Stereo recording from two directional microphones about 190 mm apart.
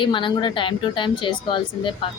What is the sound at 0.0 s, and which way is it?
Speech, 25° left (ahead or behind).